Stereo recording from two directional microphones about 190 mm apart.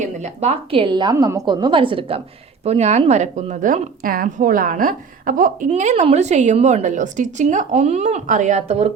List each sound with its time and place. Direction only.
0.0 s a woman's voice: 35° right (ahead or behind)